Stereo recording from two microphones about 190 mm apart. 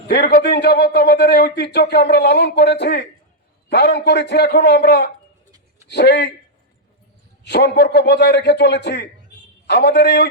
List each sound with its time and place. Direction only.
0.3 s speech: 50° left (ahead or behind)
7.4 s speech: 60° left (ahead or behind)